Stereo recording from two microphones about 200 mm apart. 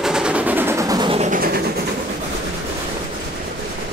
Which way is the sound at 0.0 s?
5° right (ahead or behind).